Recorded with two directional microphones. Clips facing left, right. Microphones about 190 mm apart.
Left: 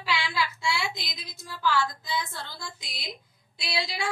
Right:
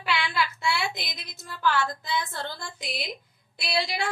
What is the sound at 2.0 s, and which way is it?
A woman's voice, 60° right (ahead or behind).